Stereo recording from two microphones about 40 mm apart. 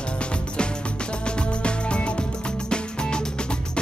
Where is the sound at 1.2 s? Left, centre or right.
Left.